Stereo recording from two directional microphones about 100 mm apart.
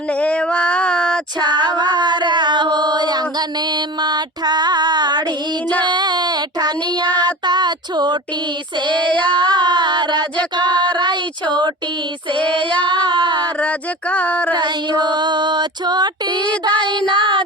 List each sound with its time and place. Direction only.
0.1 s a sound: 10° left (ahead or behind)
1.4 s music: 45° right (ahead or behind)
5.8 s a sound: 45° right (ahead or behind)
9.1 s speech: 10° left (ahead or behind)
9.6 s female singing: 50° right (ahead or behind)
12.6 s speech: 15° left (ahead or behind)
12.9 s female singing: 50° right (ahead or behind)
13.6 s speech: 15° left (ahead or behind)
14.5 s female singing: 45° right (ahead or behind)
16.4 s speech: 15° left (ahead or behind)